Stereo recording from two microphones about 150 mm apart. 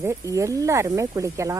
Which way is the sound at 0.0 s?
20° right (ahead or behind).